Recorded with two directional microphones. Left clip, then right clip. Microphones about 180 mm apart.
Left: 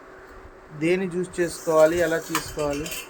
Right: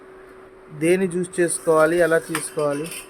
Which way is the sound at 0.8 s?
40° right (ahead or behind).